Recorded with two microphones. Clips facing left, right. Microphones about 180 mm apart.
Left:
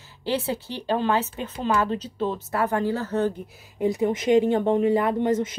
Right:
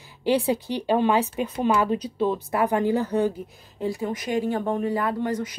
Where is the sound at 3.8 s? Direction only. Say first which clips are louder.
Left 5 dB; 20° left (ahead or behind).